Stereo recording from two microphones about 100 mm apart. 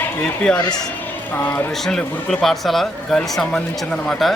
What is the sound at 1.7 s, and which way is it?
Speech, 5° left (ahead or behind).